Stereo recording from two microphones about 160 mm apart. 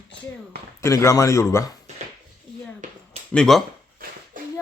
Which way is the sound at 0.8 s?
20° left (ahead or behind).